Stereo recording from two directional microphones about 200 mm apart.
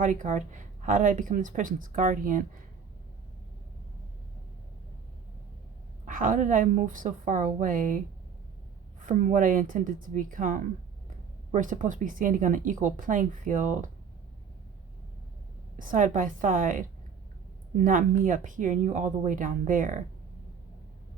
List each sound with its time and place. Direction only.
0.0 s speech: 40° right (ahead or behind)
6.1 s speech: 40° right (ahead or behind)
9.0 s speech: 40° right (ahead or behind)
15.8 s speech: 40° right (ahead or behind)